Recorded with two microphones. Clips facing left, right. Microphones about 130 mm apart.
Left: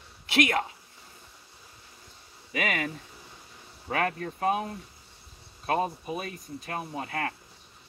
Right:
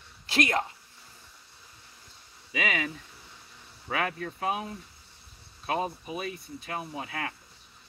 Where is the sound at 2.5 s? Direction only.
50° left (ahead or behind).